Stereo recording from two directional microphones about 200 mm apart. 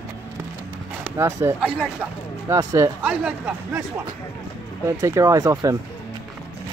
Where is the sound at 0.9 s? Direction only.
10° right (ahead or behind).